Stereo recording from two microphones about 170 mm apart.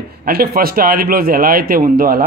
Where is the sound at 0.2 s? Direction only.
60° right (ahead or behind).